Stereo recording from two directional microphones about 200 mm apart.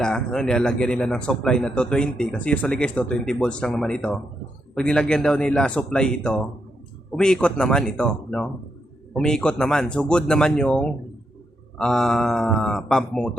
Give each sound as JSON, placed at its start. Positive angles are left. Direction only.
{"t": 0.0, "sound": "speech", "side_deg": 5}